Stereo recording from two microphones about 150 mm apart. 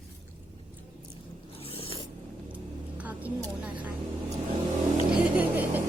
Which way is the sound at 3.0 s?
10° right (ahead or behind).